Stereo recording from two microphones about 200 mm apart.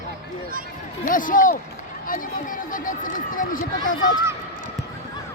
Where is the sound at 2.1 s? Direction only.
45° left (ahead or behind).